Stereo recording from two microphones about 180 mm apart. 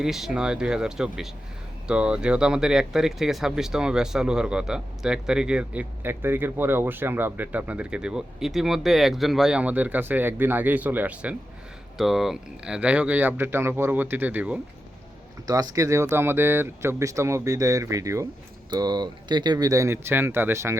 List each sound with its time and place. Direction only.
0.0 s speech: 5° right (ahead or behind)
15.4 s speech: 20° right (ahead or behind)